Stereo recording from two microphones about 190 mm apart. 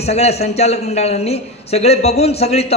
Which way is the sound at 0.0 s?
35° left (ahead or behind).